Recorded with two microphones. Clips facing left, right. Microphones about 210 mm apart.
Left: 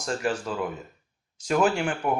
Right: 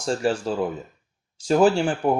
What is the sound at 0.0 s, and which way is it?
Speech, 30° right (ahead or behind).